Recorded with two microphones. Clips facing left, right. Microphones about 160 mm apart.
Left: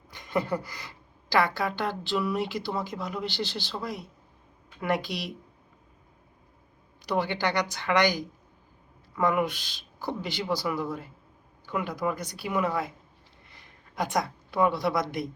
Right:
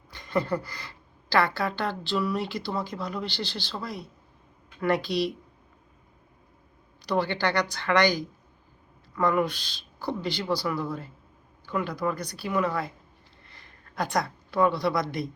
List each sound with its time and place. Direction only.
0.1 s a woman's voice: 15° left (ahead or behind)
7.2 s a woman's voice: 15° left (ahead or behind)
13.9 s a woman's voice: 15° left (ahead or behind)